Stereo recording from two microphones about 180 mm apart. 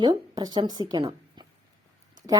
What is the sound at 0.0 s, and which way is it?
A woman's voice, 25° right (ahead or behind).